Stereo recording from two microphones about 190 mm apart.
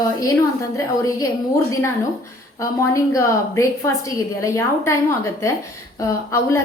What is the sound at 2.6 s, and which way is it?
A woman's voice, 15° left (ahead or behind).